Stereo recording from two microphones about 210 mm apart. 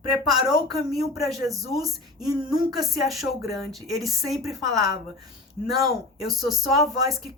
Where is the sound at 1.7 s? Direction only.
Centre (ahead or behind).